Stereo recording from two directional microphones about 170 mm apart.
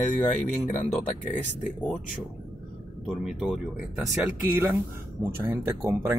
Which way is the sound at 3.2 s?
5° right (ahead or behind).